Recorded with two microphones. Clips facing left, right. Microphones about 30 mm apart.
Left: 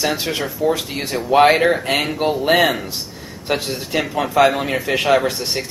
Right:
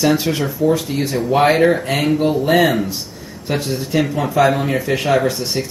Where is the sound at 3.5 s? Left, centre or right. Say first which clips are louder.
Right 1 dB; left.